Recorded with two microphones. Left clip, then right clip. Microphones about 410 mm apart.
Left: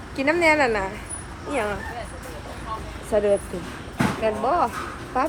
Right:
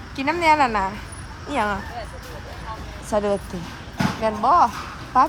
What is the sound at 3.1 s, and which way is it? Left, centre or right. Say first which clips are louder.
Speech: left 2 dB; centre.